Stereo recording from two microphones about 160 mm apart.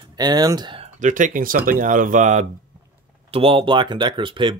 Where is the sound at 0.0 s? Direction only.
25° right (ahead or behind).